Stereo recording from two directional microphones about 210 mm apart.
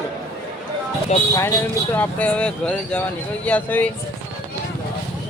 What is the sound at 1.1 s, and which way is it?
Speech, 30° left (ahead or behind).